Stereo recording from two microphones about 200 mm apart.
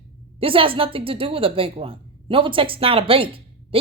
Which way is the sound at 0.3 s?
25° right (ahead or behind).